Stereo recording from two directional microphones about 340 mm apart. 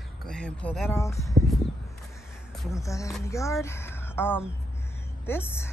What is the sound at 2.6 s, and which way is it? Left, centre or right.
Speech, centre.